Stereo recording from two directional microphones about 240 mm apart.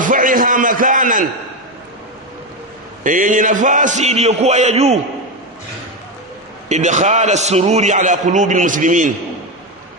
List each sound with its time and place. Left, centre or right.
0.0 s a sound: right
3.0 s a man's voice: right
6.7 s a man's voice: right